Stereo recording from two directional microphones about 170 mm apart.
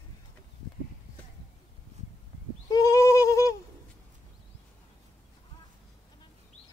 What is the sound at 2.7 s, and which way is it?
Goat, 20° left (ahead or behind).